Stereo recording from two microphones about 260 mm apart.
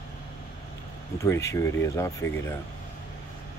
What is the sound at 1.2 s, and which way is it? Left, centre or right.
Speech, centre.